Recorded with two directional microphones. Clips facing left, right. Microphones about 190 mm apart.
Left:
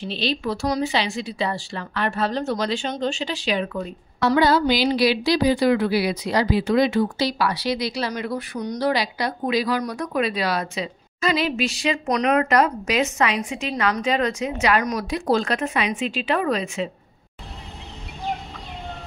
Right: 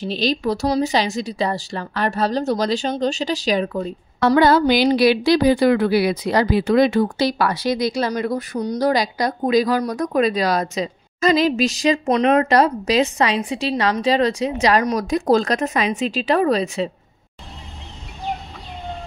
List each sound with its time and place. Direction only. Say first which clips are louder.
0.0 s a woman's voice: right 4 dB; 40° right (ahead or behind)
4.4 s speech: right 4 dB; 50° right (ahead or behind)
12.1 s a woman's voice: right 3 dB; 30° right (ahead or behind)